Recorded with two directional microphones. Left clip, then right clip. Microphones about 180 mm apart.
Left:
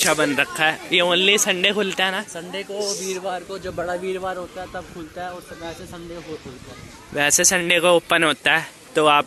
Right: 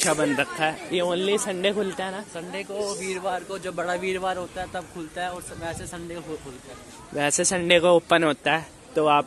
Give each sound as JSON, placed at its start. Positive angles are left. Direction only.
{"t": 0.0, "sound": "speech", "side_deg": 0}
{"t": 2.8, "sound": "speech", "side_deg": 25}
{"t": 3.4, "sound": "a man's voice", "side_deg": 35}
{"t": 3.7, "sound": "speech", "side_deg": 15}
{"t": 4.1, "sound": "speech", "side_deg": 0}
{"t": 7.2, "sound": "speech", "side_deg": -5}